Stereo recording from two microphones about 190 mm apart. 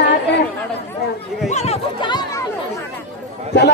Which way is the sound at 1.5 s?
35° left (ahead or behind).